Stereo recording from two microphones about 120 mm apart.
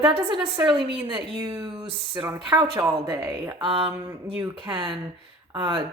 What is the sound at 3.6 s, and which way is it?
Speech, 45° right (ahead or behind).